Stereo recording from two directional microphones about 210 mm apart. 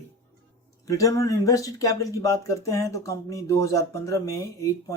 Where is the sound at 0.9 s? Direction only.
15° left (ahead or behind).